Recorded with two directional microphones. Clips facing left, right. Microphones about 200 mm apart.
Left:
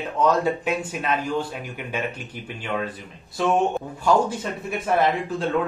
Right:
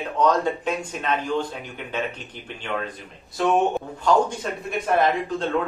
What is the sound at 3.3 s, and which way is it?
A man's voice, 5° left (ahead or behind).